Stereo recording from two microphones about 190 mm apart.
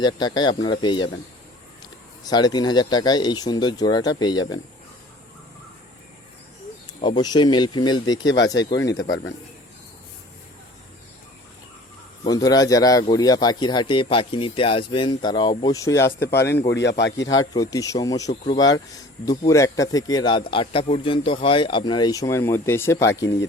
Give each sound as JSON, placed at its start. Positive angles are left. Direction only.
{"t": 0.0, "sound": "speech", "side_deg": 20}
{"t": 7.0, "sound": "speech", "side_deg": 25}
{"t": 9.0, "sound": "speech", "side_deg": 70}
{"t": 12.2, "sound": "speech", "side_deg": 20}
{"t": 16.3, "sound": "speech", "side_deg": 60}
{"t": 17.3, "sound": "speech", "side_deg": 20}